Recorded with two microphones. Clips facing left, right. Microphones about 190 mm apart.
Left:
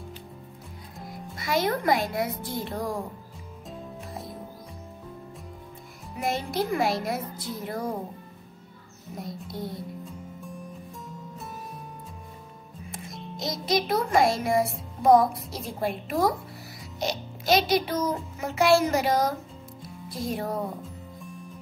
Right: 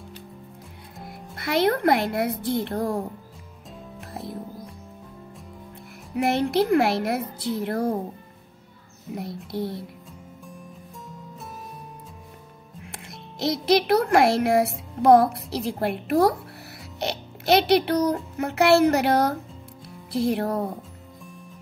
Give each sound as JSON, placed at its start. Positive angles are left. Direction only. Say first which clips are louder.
{"t": 1.3, "sound": "speech", "louder": "right 4 dB", "side_deg": -60}
{"t": 6.1, "sound": "a child's voice", "louder": "right 7 dB", "side_deg": -65}
{"t": 9.1, "sound": "a child's voice", "louder": "right 5 dB", "side_deg": -65}
{"t": 12.8, "sound": "music", "louder": "left 3 dB", "side_deg": -70}
{"t": 13.4, "sound": "a child's voice", "louder": "right 6 dB", "side_deg": -65}